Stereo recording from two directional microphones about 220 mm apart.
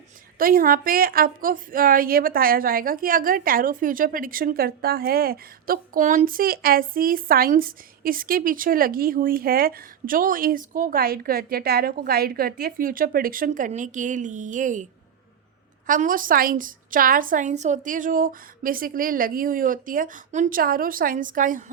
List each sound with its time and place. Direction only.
0.3 s a woman's voice: 40° right (ahead or behind)
15.9 s a woman's voice: 40° right (ahead or behind)